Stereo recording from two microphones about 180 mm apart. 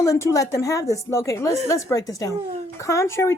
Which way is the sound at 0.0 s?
20° left (ahead or behind).